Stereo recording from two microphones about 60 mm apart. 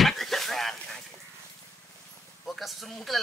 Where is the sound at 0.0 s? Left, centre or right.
Centre.